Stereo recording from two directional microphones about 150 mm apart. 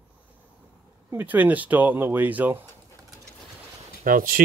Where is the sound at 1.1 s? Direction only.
10° right (ahead or behind).